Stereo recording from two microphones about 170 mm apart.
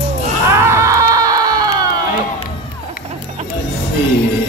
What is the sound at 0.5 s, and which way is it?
Music, 15° right (ahead or behind).